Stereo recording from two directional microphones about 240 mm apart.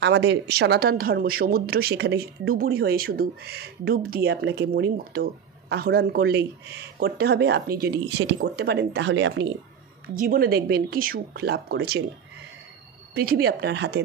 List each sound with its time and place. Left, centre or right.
0.0 s speech: right
13.1 s speech: right